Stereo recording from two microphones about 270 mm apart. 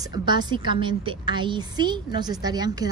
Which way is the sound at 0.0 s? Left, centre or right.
Centre.